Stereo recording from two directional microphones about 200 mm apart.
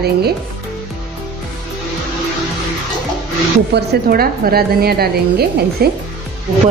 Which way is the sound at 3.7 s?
50° right (ahead or behind).